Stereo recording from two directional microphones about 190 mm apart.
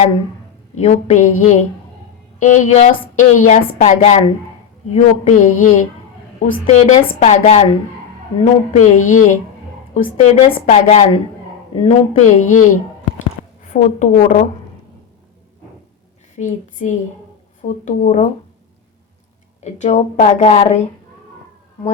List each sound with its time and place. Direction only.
0.8 s a woman's voice: 35° left (ahead or behind)
13.7 s a woman's voice: 40° left (ahead or behind)
16.3 s a woman's voice: 40° left (ahead or behind)
19.6 s a woman's voice: 35° left (ahead or behind)